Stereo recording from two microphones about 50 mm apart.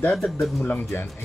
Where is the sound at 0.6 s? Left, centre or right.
Left.